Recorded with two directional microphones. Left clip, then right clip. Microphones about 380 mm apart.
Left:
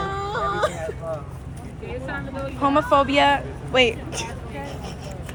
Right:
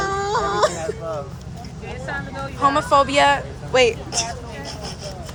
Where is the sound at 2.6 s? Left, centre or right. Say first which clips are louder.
Right 2 dB; centre.